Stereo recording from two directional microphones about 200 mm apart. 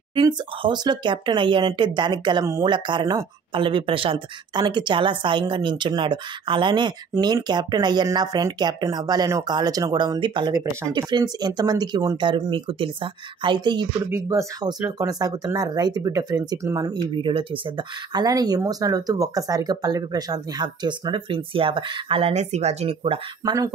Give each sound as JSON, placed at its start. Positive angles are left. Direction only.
{"t": 0.1, "sound": "speech", "side_deg": -25}